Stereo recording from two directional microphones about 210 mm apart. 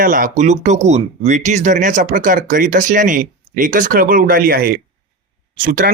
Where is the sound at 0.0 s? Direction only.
40° right (ahead or behind).